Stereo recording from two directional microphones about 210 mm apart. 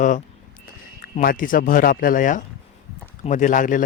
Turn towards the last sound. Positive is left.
turn(degrees=40)  # may be behind; listen again after turning